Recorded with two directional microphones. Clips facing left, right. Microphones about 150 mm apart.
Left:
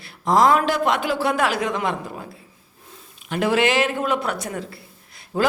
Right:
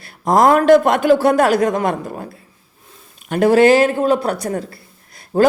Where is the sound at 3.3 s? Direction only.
40° right (ahead or behind).